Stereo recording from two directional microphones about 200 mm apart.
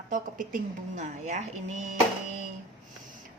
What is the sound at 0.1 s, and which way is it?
A woman's voice, 40° right (ahead or behind).